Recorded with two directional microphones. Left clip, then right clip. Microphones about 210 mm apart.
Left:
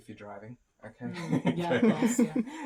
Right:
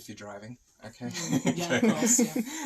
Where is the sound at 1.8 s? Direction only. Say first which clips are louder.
Right 3 dB; 20° left (ahead or behind).